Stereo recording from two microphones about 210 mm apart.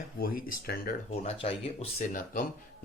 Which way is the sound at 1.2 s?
30° left (ahead or behind).